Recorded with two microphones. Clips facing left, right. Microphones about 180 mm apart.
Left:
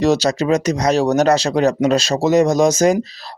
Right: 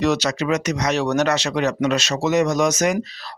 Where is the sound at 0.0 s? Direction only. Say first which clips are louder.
Left 4 dB; 30° left (ahead or behind).